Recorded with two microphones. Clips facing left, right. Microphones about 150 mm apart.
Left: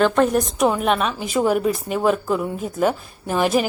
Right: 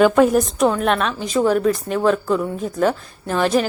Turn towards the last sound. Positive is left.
turn(degrees=10)  # may be behind; listen again after turning